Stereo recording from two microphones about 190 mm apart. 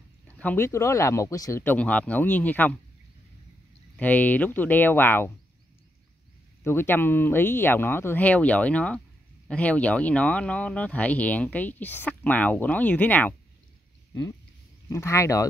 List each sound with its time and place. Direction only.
0.3 s speech: 10° left (ahead or behind)
3.9 s speech: 10° left (ahead or behind)
6.6 s speech: 10° left (ahead or behind)
14.9 s speech: 15° left (ahead or behind)